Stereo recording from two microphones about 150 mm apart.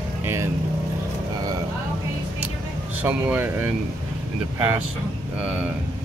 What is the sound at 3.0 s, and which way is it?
Speech, 10° right (ahead or behind).